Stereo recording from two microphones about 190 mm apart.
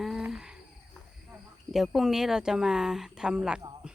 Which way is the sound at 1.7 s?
Centre (ahead or behind).